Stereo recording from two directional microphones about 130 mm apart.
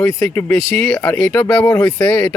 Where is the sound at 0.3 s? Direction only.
15° left (ahead or behind).